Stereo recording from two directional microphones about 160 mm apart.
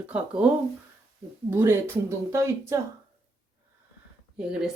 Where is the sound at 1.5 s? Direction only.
15° right (ahead or behind).